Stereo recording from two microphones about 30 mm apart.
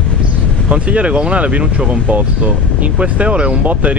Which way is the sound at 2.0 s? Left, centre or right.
Right.